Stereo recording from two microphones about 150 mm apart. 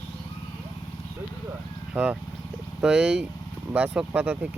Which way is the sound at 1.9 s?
10° right (ahead or behind).